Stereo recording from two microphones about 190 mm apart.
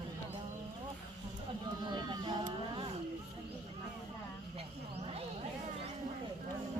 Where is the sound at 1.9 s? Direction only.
20° right (ahead or behind).